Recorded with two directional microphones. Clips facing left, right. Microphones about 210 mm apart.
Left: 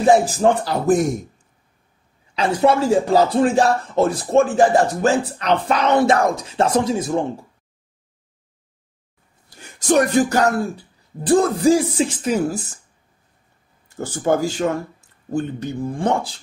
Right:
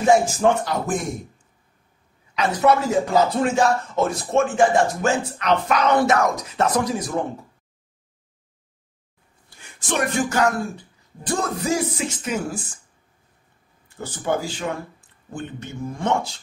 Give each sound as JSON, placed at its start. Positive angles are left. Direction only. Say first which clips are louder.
{"t": 0.0, "sound": "speech", "louder": "left 2 dB", "side_deg": 35}
{"t": 2.3, "sound": "speech", "louder": "left 2 dB", "side_deg": 30}
{"t": 9.6, "sound": "music", "louder": "left 8 dB", "side_deg": 40}
{"t": 11.2, "sound": "speech", "louder": "left 9 dB", "side_deg": 30}
{"t": 13.8, "sound": "speech", "louder": "left 6 dB", "side_deg": 45}